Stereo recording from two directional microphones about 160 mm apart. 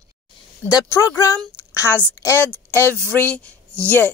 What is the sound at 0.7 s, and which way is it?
A woman's voice, 20° left (ahead or behind).